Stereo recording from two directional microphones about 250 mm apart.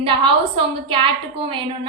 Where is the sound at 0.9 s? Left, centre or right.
Right.